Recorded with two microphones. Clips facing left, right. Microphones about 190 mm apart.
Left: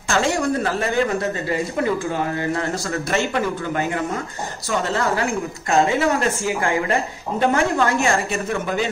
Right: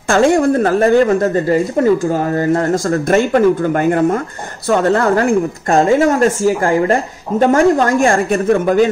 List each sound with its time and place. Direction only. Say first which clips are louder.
0.1 s a woman's voice: right 9 dB; 50° right (ahead or behind)